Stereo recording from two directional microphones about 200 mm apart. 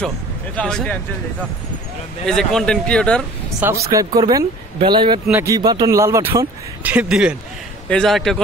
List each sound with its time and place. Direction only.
0.6 s speech: 5° left (ahead or behind)
2.2 s speech: 5° left (ahead or behind)
3.8 s speech: 15° right (ahead or behind)
5.2 s speech: 10° right (ahead or behind)